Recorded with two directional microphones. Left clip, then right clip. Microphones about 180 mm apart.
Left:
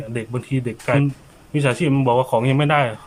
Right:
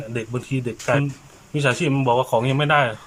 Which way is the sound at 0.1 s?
Centre (ahead or behind).